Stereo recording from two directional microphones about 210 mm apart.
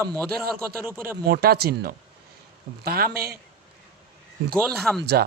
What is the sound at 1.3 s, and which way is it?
Speech, 45° right (ahead or behind).